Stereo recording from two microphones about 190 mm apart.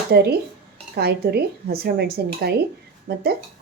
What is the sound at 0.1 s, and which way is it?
Speech, 55° right (ahead or behind).